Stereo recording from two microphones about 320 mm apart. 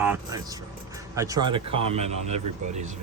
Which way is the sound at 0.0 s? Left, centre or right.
Centre.